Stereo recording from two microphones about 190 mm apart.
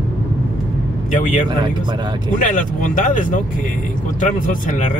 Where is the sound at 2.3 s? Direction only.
45° left (ahead or behind).